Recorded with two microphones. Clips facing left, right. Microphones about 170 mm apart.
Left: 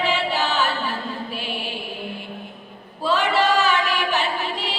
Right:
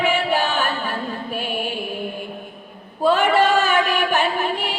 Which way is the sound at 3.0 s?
50° right (ahead or behind).